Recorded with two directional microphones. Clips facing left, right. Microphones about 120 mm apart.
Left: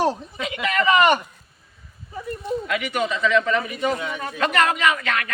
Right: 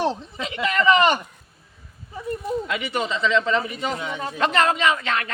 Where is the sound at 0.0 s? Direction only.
25° right (ahead or behind).